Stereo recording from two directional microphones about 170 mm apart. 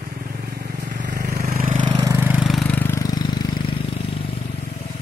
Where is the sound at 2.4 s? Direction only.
Centre (ahead or behind); by 3.8 s 30° left (ahead or behind).